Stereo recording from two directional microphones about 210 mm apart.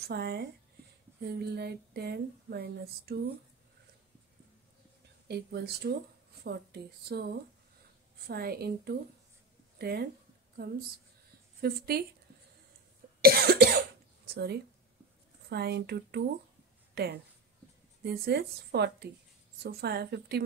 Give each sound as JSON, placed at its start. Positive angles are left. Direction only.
{"t": 0.1, "sound": "speech", "side_deg": -50}
{"t": 5.3, "sound": "speech", "side_deg": -50}
{"t": 8.3, "sound": "speech", "side_deg": -45}
{"t": 13.2, "sound": "cough", "side_deg": -45}
{"t": 14.3, "sound": "speech", "side_deg": -50}